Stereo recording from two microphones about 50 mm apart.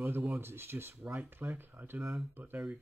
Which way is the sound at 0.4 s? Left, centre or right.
Right.